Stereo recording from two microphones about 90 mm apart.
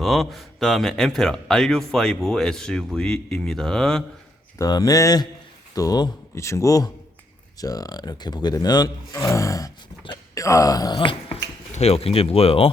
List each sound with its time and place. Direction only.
0.0 s a man's voice: centre (ahead or behind)
4.5 s speech: 45° left (ahead or behind)
6.3 s speech: 35° left (ahead or behind)
9.1 s speech: 35° left (ahead or behind); by 11.3 s 70° left (ahead or behind)
11.9 s speech: 90° left